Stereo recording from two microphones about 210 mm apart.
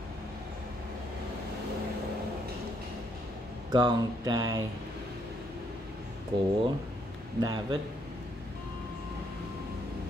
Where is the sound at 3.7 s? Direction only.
20° right (ahead or behind).